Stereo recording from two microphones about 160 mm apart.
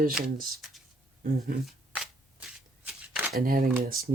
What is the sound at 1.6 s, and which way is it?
Shuffling cards, centre (ahead or behind).